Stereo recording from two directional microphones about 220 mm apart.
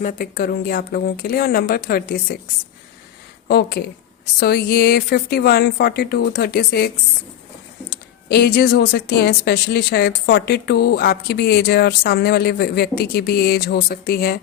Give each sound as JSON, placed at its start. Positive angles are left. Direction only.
{"t": 0.0, "sound": "speech", "side_deg": 40}
{"t": 3.5, "sound": "speech", "side_deg": 45}